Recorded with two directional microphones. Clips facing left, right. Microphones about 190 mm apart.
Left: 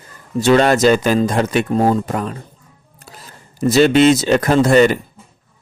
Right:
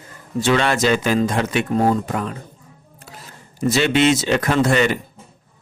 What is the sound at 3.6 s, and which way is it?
Speech, 40° left (ahead or behind).